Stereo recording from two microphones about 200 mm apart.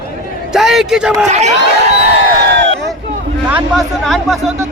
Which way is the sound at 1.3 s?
35° right (ahead or behind).